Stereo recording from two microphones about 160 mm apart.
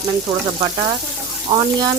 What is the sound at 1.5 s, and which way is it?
Speech, 25° right (ahead or behind).